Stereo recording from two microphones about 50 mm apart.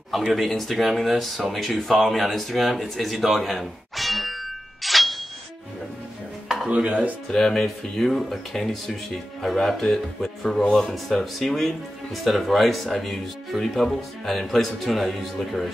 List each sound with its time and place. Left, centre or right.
0.1 s speech: centre
6.7 s dishes: right
7.2 s speech: centre